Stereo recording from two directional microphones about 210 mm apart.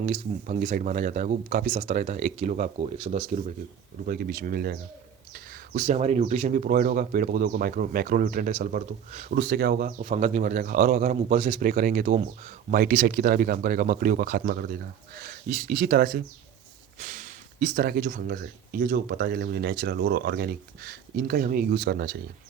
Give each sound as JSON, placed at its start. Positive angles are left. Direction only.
{"t": 0.0, "sound": "speech", "side_deg": -35}
{"t": 4.0, "sound": "speech", "side_deg": -45}
{"t": 11.7, "sound": "speech", "side_deg": -40}